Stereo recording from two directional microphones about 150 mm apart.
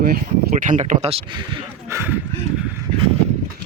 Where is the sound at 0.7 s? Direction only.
55° right (ahead or behind).